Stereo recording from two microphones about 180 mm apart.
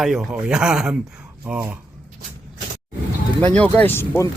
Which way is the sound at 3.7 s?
10° left (ahead or behind).